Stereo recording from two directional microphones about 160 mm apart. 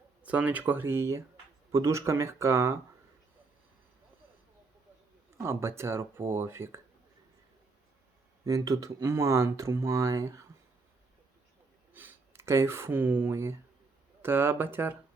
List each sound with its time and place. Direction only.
0.2 s speech: 10° right (ahead or behind)
5.4 s speech: 15° right (ahead or behind)
8.4 s speech: 20° right (ahead or behind)
11.9 s speech: 15° right (ahead or behind)